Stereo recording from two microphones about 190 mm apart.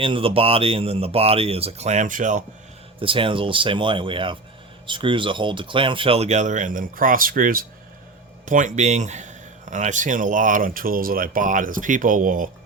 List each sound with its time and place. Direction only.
0.0 s speech: 30° right (ahead or behind)
3.0 s speech: 30° right (ahead or behind); by 12.5 s 45° right (ahead or behind)